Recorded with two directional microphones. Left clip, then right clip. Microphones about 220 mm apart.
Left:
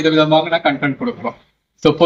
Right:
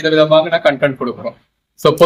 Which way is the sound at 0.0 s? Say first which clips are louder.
Right 3 dB; 25° right (ahead or behind).